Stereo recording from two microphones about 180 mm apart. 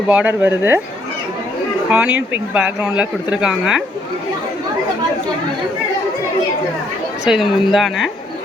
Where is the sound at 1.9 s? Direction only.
5° right (ahead or behind).